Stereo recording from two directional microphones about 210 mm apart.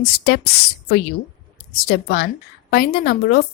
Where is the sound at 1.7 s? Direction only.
45° left (ahead or behind).